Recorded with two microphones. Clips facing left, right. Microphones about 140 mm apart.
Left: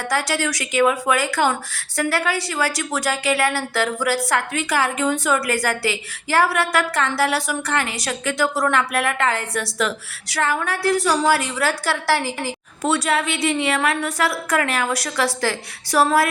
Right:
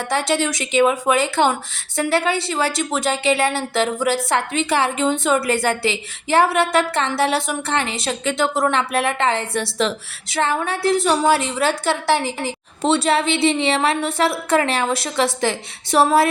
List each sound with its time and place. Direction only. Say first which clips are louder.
0.1 s a woman's voice: right 3 dB; 25° right (ahead or behind)